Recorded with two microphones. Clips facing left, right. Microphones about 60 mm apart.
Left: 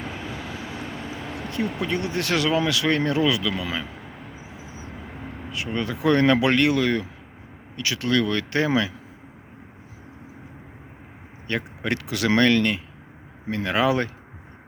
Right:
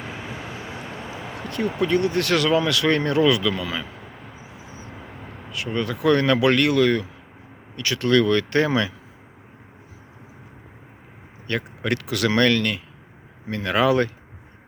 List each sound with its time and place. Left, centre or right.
0.3 s vehicle: right
1.4 s a sound: centre
1.6 s speech: centre
1.9 s speech: centre
3.8 s vehicle: centre
4.6 s vehicle: centre
5.7 s speech: centre
11.4 s speech: centre